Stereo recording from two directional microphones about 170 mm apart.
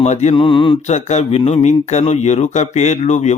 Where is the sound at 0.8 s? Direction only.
40° left (ahead or behind).